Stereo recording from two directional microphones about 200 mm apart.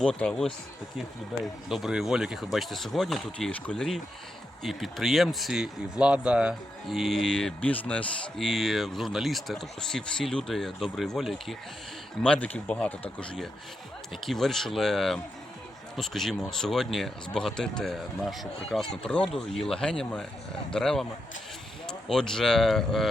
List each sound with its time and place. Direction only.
0.0 s speech: 5° left (ahead or behind)